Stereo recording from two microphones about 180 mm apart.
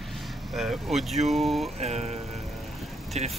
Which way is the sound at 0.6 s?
Centre (ahead or behind).